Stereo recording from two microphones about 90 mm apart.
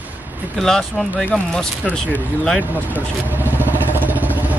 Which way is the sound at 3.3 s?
20° right (ahead or behind).